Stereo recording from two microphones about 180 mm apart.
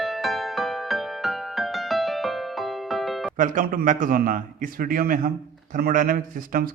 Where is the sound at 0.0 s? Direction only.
Centre (ahead or behind).